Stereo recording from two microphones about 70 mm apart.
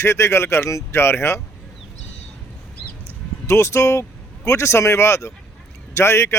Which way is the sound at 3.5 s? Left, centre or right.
Left.